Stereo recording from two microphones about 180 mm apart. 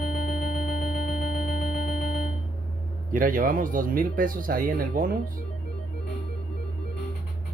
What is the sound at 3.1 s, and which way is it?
Speech, 45° right (ahead or behind).